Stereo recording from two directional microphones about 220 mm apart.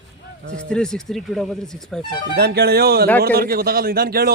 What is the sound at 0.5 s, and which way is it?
Speech, 5° left (ahead or behind).